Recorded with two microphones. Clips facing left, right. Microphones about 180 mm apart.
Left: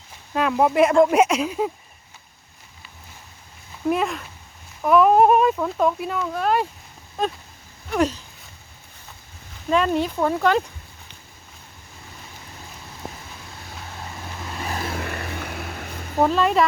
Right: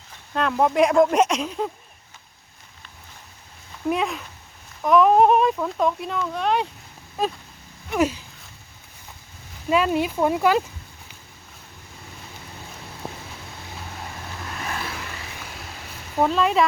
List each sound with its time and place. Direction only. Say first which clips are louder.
0.3 s speech: left 1 dB; 5° left (ahead or behind)
3.8 s speech: left 2 dB; centre (ahead or behind)
7.9 s speech: even; 10° right (ahead or behind)
9.6 s speech: even; 5° right (ahead or behind)
14.6 s vehicle: left 3 dB; 35° left (ahead or behind)
14.9 s vehicle: left 7 dB; 60° left (ahead or behind)
16.2 s speech: left 1 dB; centre (ahead or behind)